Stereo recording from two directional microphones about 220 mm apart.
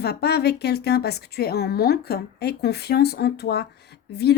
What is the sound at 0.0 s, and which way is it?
Speech, 45° left (ahead or behind).